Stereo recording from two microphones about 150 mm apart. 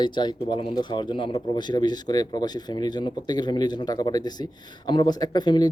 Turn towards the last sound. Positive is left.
turn(degrees=30)  # may be behind; listen again after turning